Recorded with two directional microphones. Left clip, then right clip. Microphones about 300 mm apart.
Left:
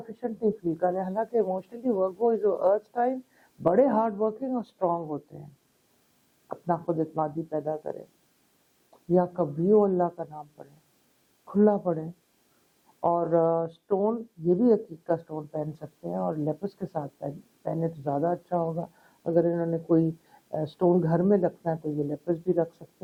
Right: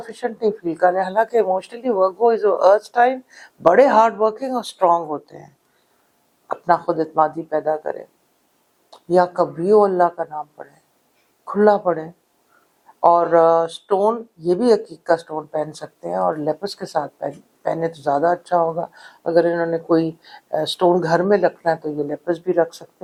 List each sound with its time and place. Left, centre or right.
0.0 s speech: centre
6.5 s speech: centre
14.0 s speech: centre
14.6 s speech: centre
14.8 s speech: centre